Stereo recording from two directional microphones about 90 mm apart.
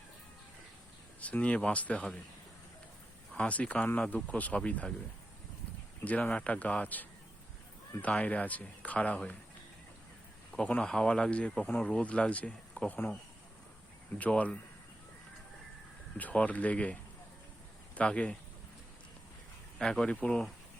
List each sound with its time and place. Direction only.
1.2 s speech: 15° left (ahead or behind)
3.3 s speech: 15° left (ahead or behind)
6.1 s speech: 15° left (ahead or behind)
10.5 s speech: 10° left (ahead or behind)
14.2 s speech: 15° left (ahead or behind)
16.1 s speech: 15° left (ahead or behind)
19.8 s speech: 10° left (ahead or behind)